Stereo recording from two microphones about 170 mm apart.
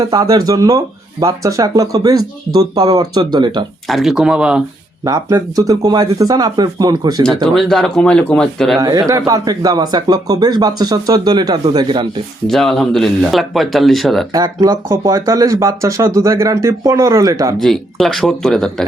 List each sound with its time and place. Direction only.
0.1 s speech: 25° right (ahead or behind)
3.8 s speech: centre (ahead or behind)
5.0 s speech: 20° right (ahead or behind)
7.4 s speech: centre (ahead or behind)
8.8 s speech: 20° right (ahead or behind)
12.5 s speech: centre (ahead or behind)
14.3 s speech: 20° right (ahead or behind)
17.6 s speech: centre (ahead or behind)